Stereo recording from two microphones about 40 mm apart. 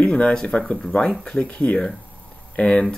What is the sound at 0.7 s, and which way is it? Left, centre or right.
Speech, centre.